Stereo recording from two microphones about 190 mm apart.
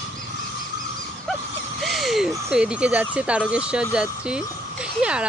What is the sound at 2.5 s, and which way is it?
Speech, 5° right (ahead or behind).